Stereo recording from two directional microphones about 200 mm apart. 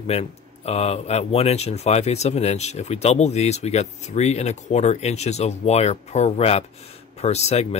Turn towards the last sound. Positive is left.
turn(degrees=30)  # may be behind; listen again after turning